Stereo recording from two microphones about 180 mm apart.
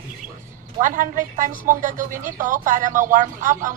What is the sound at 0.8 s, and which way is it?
Speech, 45° right (ahead or behind).